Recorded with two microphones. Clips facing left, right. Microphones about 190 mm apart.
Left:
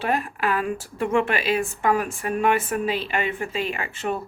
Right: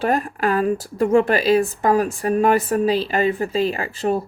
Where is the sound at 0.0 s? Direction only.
45° right (ahead or behind).